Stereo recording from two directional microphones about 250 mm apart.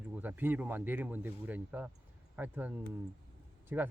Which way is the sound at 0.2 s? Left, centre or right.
Centre.